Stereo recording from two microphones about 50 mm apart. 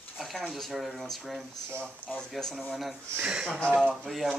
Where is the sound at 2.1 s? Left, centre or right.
Left.